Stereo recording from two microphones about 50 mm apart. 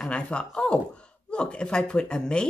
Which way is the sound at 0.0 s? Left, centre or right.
Left.